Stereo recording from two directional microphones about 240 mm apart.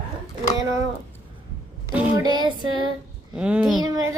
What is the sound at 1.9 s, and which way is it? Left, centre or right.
Speech, centre.